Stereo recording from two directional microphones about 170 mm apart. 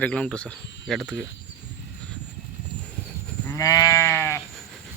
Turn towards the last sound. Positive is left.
turn(degrees=15)  # may be behind; listen again after turning